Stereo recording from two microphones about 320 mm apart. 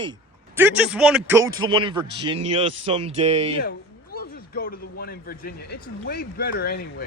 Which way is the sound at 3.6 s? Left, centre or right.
Left.